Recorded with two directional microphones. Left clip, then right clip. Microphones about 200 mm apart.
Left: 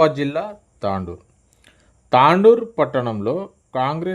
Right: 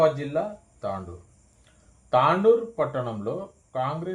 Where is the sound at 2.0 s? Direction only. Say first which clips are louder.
Left 7 dB; 35° left (ahead or behind).